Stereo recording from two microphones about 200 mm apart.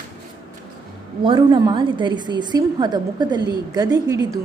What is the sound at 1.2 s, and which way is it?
A woman's voice, 25° right (ahead or behind).